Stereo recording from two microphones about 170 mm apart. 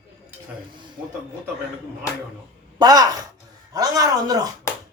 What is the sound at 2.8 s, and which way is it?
A man's voice, 20° right (ahead or behind).